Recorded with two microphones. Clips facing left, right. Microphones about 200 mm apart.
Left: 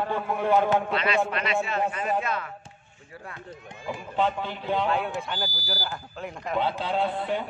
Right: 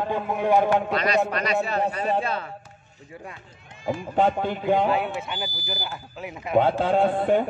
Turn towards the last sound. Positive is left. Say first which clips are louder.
# right 7 dB
turn(degrees=-50)  # may be behind; listen again after turning